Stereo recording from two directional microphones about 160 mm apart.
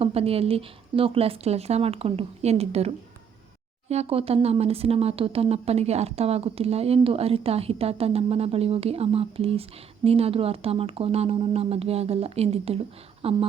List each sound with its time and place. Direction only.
0.0 s speech: 40° right (ahead or behind)